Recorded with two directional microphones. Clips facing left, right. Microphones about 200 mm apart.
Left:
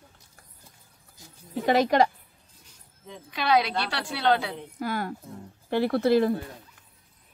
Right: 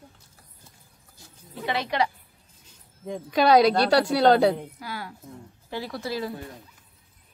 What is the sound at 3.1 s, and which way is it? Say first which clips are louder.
A woman's voice: right 6 dB; 40° right (ahead or behind).